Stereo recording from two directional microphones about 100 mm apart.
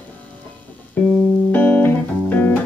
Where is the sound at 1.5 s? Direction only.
15° left (ahead or behind).